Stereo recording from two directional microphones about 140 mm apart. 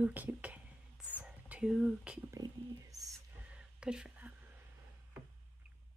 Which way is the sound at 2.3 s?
25° right (ahead or behind).